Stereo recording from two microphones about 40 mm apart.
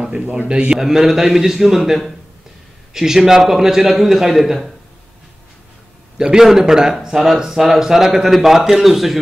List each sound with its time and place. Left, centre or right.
0.0 s a man's voice: right
0.7 s a man's voice: centre
6.3 s speech: centre